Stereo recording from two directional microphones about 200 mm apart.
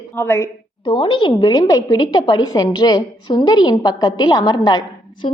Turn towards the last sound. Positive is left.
turn(degrees=20)  # may be behind; listen again after turning